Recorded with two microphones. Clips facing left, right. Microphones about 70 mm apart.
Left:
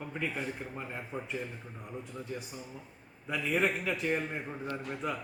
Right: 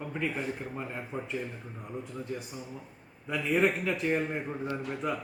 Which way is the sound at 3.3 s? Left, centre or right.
Centre.